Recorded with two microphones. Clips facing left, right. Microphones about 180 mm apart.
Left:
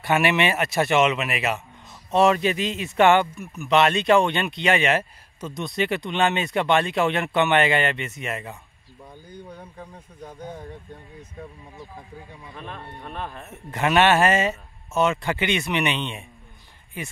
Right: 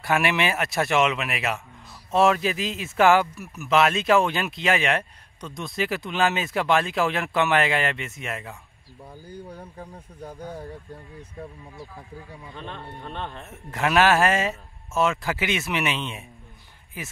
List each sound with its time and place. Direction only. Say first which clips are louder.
0.0 s speech: left 2 dB; centre (ahead or behind)
11.7 s speech: even; 15° left (ahead or behind)
12.5 s speech: even; 5° left (ahead or behind)